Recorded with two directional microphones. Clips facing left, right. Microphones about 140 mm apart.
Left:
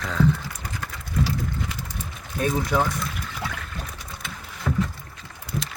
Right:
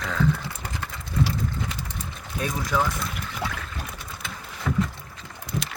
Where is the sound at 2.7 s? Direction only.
20° left (ahead or behind).